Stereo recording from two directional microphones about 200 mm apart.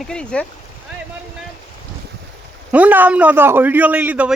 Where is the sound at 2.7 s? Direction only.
10° right (ahead or behind).